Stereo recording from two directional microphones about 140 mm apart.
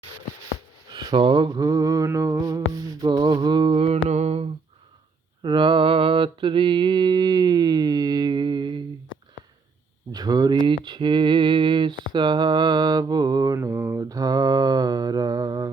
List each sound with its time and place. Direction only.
0.9 s mantra: 35° right (ahead or behind)
4.1 s humming: 50° right (ahead or behind)
5.4 s mantra: 35° right (ahead or behind)
10.1 s mantra: 30° right (ahead or behind)